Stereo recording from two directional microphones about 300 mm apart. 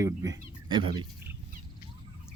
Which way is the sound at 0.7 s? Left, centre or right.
Centre.